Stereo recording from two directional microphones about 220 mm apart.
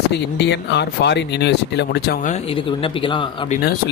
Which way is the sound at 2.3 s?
25° left (ahead or behind).